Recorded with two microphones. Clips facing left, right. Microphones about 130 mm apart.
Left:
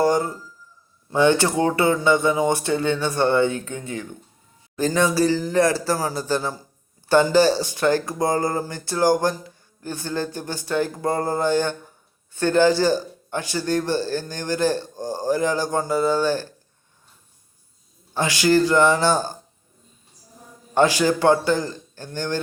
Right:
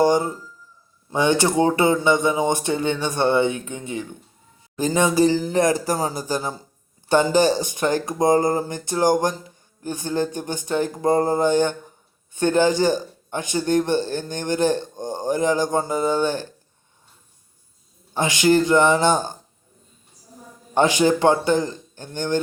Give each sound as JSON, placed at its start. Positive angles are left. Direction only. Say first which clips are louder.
{"t": 0.0, "sound": "a man's voice", "louder": "right 2 dB", "side_deg": -20}
{"t": 18.1, "sound": "a man's voice", "louder": "right 1 dB", "side_deg": -20}
{"t": 20.7, "sound": "a man's voice", "louder": "right 1 dB", "side_deg": -20}